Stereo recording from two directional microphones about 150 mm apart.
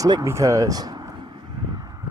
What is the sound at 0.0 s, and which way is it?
Speech, 25° right (ahead or behind).